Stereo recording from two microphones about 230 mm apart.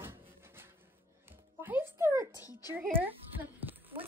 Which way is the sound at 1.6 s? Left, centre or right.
Centre.